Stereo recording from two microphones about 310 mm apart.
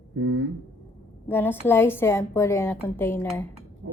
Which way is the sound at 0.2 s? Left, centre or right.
Right.